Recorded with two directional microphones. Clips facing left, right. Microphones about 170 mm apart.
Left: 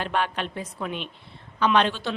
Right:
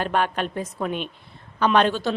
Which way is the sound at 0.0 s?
45° right (ahead or behind).